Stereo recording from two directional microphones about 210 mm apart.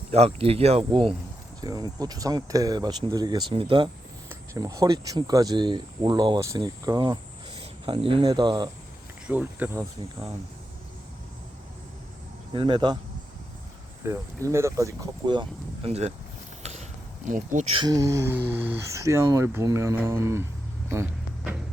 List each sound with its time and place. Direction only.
0.1 s speech: 30° right (ahead or behind)
9.2 s speech: 10° right (ahead or behind)
12.5 s speech: 20° right (ahead or behind)
14.0 s speech: 15° right (ahead or behind); by 16.1 s 30° right (ahead or behind)
17.2 s speech: 35° right (ahead or behind); by 20.4 s 15° right (ahead or behind)
20.9 s vehicle: 15° right (ahead or behind)